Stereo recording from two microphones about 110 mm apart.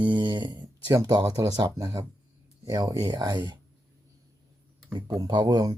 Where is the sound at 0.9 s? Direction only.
30° right (ahead or behind).